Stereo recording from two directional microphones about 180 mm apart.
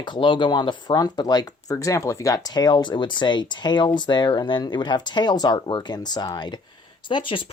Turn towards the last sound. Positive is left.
turn(degrees=25)  # may be behind; listen again after turning